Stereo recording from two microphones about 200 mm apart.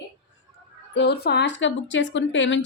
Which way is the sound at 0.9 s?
55° left (ahead or behind).